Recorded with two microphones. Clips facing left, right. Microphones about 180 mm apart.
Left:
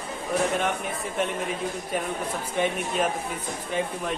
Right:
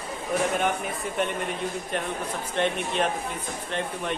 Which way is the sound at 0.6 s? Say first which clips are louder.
Right 1 dB; centre (ahead or behind).